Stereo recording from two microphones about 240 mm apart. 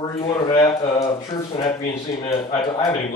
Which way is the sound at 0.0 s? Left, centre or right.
Centre.